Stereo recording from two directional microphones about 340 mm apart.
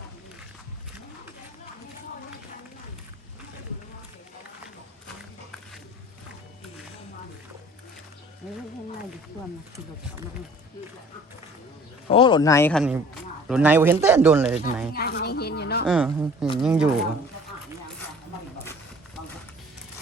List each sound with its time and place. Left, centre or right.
12.0 s a man's voice: centre
14.9 s a sound: left
15.9 s speech: centre